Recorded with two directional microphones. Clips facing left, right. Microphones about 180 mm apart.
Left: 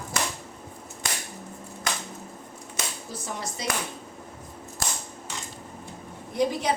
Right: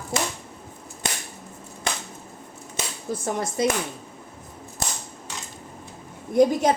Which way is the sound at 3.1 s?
50° right (ahead or behind).